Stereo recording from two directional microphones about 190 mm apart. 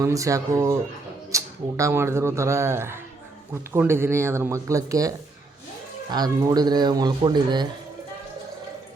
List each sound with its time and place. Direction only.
0.0 s a man's voice: 15° right (ahead or behind)